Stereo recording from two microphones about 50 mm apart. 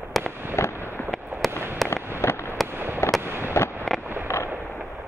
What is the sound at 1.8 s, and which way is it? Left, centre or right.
Fireworks, left.